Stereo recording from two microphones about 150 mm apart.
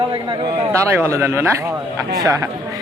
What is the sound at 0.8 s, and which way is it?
A man's voice, 20° right (ahead or behind).